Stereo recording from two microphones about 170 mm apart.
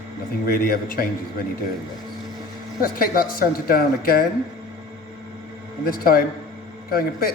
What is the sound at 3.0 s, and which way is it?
Speech, 60° left (ahead or behind).